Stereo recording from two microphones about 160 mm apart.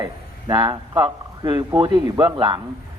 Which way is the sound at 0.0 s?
30° right (ahead or behind).